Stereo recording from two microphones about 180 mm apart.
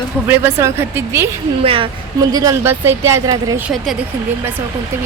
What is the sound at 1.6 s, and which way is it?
A woman's voice, 30° right (ahead or behind).